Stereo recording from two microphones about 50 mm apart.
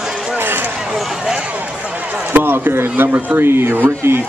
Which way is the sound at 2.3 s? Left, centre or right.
Right.